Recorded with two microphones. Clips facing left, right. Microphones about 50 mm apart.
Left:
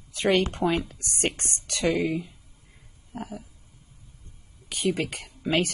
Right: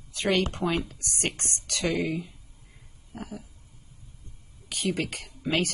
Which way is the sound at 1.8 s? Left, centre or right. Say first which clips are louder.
Left 3 dB; centre.